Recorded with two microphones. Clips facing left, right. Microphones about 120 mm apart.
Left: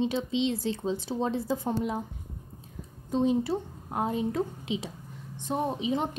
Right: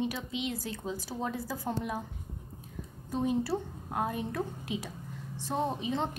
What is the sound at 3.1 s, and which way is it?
A woman's voice, 20° left (ahead or behind).